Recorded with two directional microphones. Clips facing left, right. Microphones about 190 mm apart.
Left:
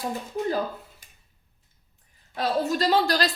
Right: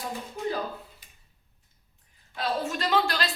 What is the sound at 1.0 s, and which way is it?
Tick-tock, 45° left (ahead or behind).